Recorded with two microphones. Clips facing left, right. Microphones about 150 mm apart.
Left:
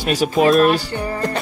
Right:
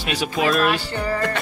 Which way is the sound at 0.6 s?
35° left (ahead or behind).